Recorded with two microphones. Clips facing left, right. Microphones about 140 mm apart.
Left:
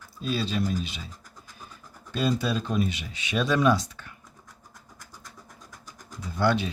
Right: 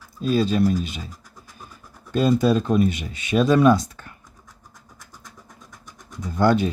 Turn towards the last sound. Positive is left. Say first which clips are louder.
# right 6 dB
turn(degrees=-45)  # may be behind; listen again after turning